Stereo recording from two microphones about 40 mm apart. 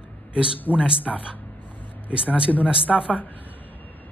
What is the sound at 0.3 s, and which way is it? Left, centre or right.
Speech, right.